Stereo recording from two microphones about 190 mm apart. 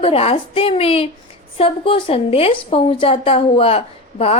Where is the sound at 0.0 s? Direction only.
30° left (ahead or behind).